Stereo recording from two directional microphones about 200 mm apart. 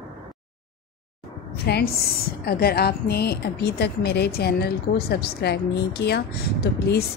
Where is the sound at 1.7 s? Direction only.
50° left (ahead or behind).